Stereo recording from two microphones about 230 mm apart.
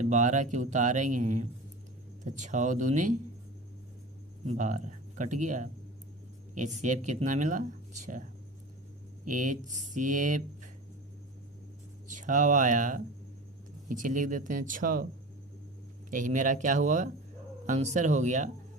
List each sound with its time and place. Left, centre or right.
0.0 s speech: right
4.4 s speech: right
9.2 s speech: right
12.0 s speech: right
16.0 s speech: right